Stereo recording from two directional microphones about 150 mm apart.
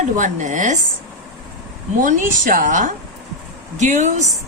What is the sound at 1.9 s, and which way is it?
Speech, 60° right (ahead or behind).